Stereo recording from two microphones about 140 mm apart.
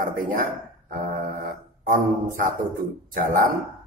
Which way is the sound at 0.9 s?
90° right.